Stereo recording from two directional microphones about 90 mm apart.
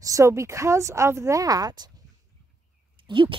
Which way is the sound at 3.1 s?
65° right (ahead or behind).